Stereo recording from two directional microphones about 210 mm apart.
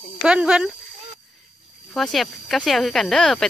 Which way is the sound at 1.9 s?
Centre (ahead or behind).